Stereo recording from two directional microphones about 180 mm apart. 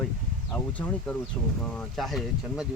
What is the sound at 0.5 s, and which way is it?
Speech, 5° left (ahead or behind).